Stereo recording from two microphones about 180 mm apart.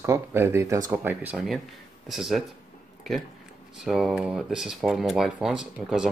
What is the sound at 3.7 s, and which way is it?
Speech, centre (ahead or behind).